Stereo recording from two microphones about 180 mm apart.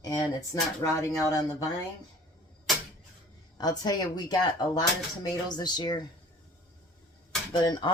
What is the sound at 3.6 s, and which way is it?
Speech, 20° left (ahead or behind).